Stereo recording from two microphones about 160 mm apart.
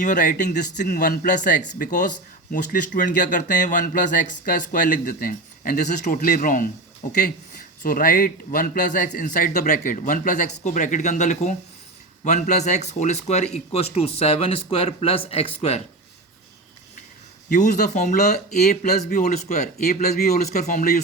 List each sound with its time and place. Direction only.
0.0 s speech: 55° left (ahead or behind)
0.8 s a man's voice: 65° left (ahead or behind); by 15.8 s 40° left (ahead or behind)
17.5 s speech: 50° left (ahead or behind)
18.9 s speech: 70° left (ahead or behind)
19.2 s speech: 45° left (ahead or behind)
20.1 s speech: 70° left (ahead or behind)